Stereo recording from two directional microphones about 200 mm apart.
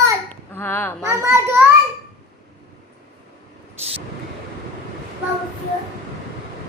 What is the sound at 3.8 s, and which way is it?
Thunder, 30° right (ahead or behind).